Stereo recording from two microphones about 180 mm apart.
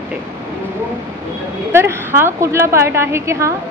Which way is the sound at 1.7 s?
15° right (ahead or behind).